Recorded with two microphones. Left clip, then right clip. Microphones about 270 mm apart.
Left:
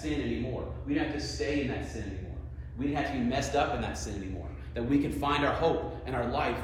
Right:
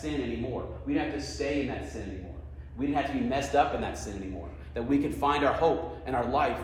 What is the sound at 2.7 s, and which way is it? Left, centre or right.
A man's voice, right.